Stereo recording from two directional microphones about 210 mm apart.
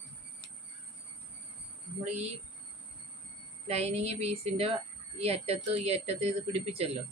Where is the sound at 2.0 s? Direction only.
30° right (ahead or behind).